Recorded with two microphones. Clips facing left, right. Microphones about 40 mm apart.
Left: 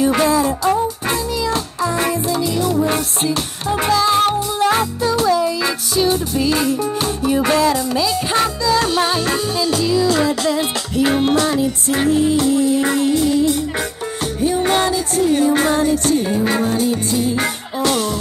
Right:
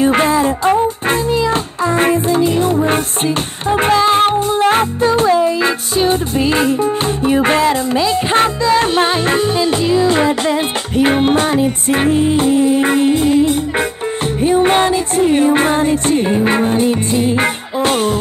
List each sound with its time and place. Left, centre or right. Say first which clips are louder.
0.0 s music: right 3 dB; right